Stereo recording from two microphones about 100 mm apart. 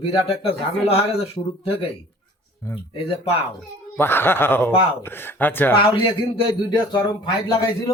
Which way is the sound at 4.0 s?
20° left (ahead or behind).